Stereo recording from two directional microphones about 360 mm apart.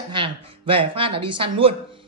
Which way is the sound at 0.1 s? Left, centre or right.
Centre.